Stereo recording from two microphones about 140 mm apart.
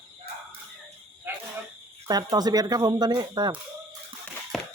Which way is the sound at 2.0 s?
30° right (ahead or behind).